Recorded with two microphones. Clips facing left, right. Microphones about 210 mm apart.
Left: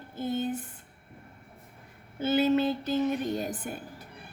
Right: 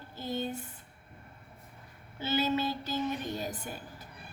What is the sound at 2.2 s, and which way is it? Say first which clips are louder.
Female singing: left 6 dB; 50° left (ahead or behind).